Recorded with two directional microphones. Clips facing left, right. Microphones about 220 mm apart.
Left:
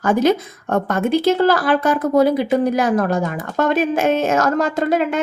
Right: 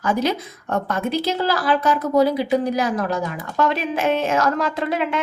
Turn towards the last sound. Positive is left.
turn(degrees=45)  # may be behind; listen again after turning